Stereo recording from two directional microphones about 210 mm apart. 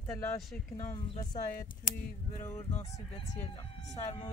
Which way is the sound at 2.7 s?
30° left (ahead or behind).